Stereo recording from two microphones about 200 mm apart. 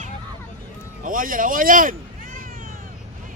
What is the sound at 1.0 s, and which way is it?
Cat, 45° right (ahead or behind).